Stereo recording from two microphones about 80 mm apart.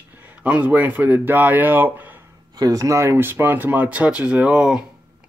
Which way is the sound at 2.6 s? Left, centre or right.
Right.